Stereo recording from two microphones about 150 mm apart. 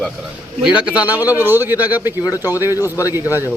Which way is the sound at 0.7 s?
5° right (ahead or behind).